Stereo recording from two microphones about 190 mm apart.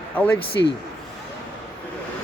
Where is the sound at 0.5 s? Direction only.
65° left (ahead or behind).